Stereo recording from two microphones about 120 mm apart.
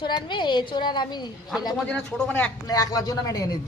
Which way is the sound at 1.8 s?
10° left (ahead or behind).